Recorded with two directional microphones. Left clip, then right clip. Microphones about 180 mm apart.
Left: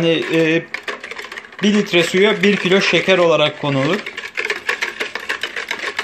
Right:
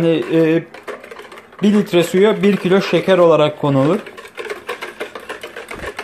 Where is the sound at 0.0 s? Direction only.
10° right (ahead or behind).